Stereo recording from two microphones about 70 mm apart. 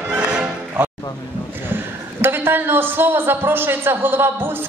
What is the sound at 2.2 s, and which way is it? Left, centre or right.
A man's voice, right.